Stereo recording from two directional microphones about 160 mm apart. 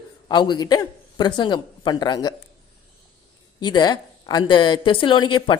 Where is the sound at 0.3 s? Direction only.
30° left (ahead or behind).